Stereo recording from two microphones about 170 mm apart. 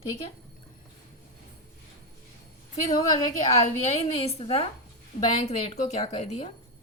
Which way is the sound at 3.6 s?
40° left (ahead or behind).